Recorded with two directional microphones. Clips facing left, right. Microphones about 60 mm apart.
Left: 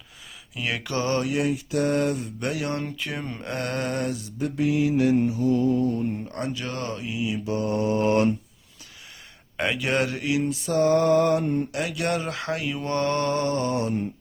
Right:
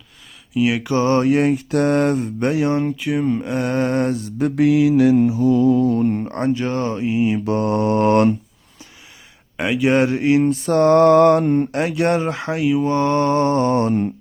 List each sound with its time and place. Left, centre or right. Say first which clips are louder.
0.5 s mantra: right 11 dB; centre
0.9 s speech: right 7 dB; right
2.5 s speech: right 9 dB; right
2.9 s speech: right 12 dB; centre
3.7 s speech: right 9 dB; right
4.4 s mantra: right 8 dB; right
6.2 s speech: right 10 dB; right
7.3 s mantra: right 7 dB; right
9.6 s speech: right 5 dB; centre
9.8 s speech: right 12 dB; right
10.4 s mantra: right 7 dB; right
11.7 s speech: right 8 dB; right
12.5 s speech: right 11 dB; centre; by 14.1 s right